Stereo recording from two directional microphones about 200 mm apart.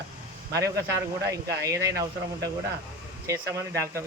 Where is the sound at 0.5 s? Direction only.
15° right (ahead or behind).